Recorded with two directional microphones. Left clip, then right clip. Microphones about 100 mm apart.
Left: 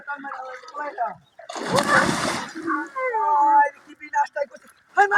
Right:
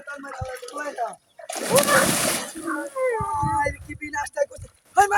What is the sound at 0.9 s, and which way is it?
Speech, 20° right (ahead or behind).